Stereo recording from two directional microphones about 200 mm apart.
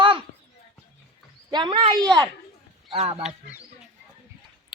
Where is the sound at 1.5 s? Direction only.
20° right (ahead or behind).